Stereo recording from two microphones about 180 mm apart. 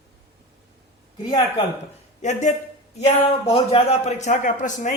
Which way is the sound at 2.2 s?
40° left (ahead or behind).